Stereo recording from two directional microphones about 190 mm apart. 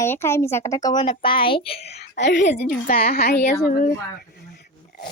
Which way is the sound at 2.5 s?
55° left (ahead or behind).